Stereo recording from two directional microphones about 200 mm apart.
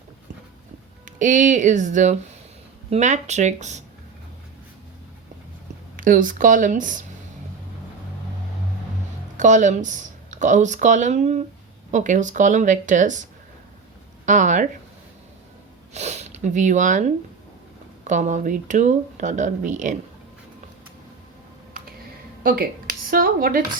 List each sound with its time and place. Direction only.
1.0 s speech: 40° right (ahead or behind)
6.0 s speech: 40° right (ahead or behind)
9.4 s speech: 40° right (ahead or behind)
14.3 s speech: 40° right (ahead or behind)
15.9 s speech: 35° right (ahead or behind)
23.0 s a woman's voice: 45° right (ahead or behind)